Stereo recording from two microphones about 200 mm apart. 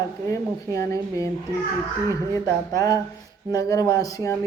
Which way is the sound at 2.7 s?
20° left (ahead or behind).